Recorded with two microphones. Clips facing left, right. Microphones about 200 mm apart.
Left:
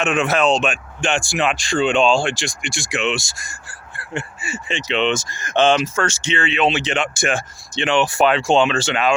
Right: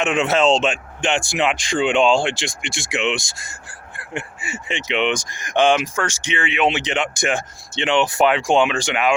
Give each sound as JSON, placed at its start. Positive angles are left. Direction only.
{"t": 0.0, "sound": "speech", "side_deg": -20}